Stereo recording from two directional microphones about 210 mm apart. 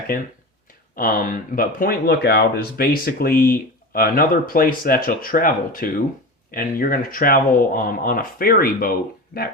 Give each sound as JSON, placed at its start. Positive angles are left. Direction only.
{"t": 0.9, "sound": "speech", "side_deg": 40}